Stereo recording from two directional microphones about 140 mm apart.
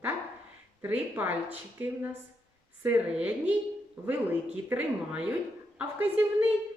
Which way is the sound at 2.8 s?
10° right (ahead or behind).